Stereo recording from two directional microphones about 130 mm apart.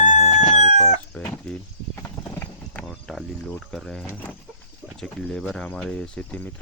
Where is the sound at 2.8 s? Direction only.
Centre (ahead or behind).